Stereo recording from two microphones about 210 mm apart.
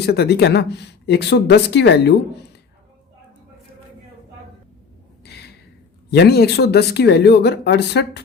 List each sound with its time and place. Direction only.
0.0 s speech: 50° left (ahead or behind)
5.2 s a sound: 50° left (ahead or behind)
6.1 s speech: 50° left (ahead or behind)